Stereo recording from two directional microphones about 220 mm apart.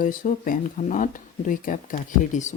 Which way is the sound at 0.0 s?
40° left (ahead or behind).